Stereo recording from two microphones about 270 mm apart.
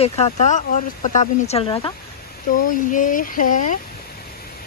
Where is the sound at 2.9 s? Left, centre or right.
Left.